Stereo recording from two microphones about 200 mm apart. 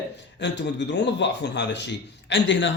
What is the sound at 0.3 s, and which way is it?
Speech, 60° left (ahead or behind).